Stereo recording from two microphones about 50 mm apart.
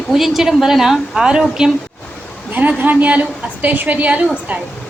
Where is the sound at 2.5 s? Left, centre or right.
Right.